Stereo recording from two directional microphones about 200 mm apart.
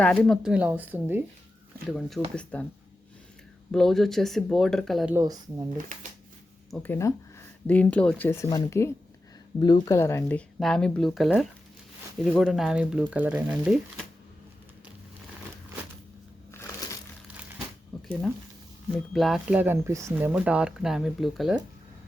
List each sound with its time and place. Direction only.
0.0 s speech: 5° left (ahead or behind)
1.9 s speech: centre (ahead or behind)
3.7 s speech: centre (ahead or behind)
5.1 s speech: 20° right (ahead or behind)
5.7 s speech: 40° right (ahead or behind)
6.7 s speech: 5° left (ahead or behind)
16.5 s crumpling: 15° left (ahead or behind)
17.9 s a sound: centre (ahead or behind)
18.9 s speech: centre (ahead or behind)